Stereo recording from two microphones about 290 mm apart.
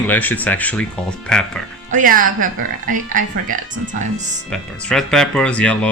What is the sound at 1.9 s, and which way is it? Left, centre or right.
Speech, right.